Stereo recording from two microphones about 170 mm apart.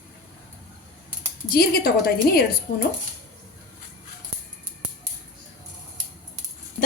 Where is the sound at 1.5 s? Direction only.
60° left (ahead or behind).